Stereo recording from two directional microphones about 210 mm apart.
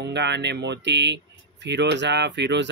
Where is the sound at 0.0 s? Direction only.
55° right (ahead or behind).